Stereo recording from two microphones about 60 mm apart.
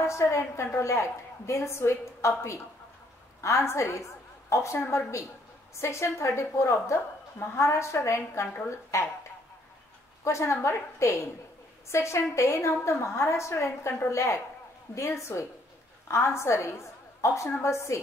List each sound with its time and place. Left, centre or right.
0.0 s a woman's voice: left
10.2 s a woman's voice: left